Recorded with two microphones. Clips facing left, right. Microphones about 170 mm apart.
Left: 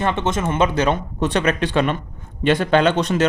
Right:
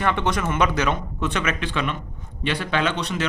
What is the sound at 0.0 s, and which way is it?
A man's voice, 25° left (ahead or behind).